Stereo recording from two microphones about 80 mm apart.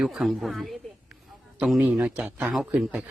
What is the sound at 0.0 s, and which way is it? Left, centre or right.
Speech, centre.